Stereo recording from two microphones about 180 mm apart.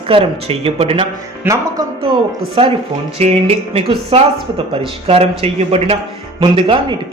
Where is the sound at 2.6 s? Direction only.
30° right (ahead or behind).